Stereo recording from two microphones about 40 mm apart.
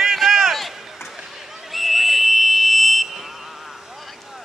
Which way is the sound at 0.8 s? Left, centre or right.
Centre.